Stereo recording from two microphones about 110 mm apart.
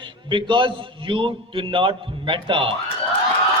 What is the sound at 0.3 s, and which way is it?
A man's voice, 45° right (ahead or behind).